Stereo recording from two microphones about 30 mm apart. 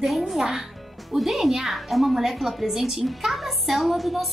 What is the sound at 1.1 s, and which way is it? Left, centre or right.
A child's voice, centre.